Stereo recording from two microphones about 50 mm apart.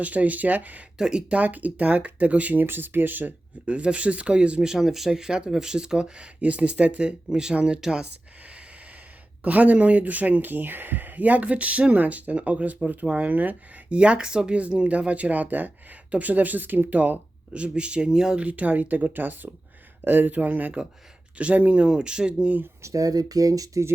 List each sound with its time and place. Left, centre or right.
0.0 s speech: right
0.9 s speech: centre
1.3 s speech: right
3.7 s speech: right
4.6 s speech: centre
9.4 s speech: right
14.0 s speech: centre
18.3 s speech: right
22.8 s speech: right